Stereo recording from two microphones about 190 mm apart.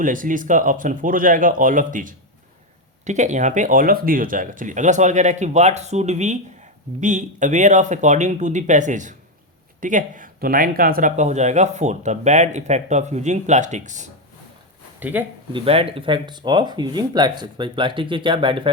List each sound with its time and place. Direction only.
0.0 s speech: 45° right (ahead or behind)
14.9 s speech: 10° right (ahead or behind)
15.5 s speech: 30° right (ahead or behind)